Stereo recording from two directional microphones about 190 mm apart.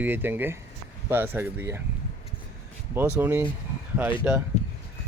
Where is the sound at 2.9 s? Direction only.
10° right (ahead or behind).